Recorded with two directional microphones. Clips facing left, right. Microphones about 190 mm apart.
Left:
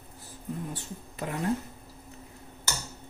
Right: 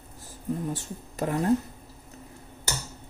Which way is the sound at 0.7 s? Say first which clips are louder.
Right 4 dB; 45° right (ahead or behind).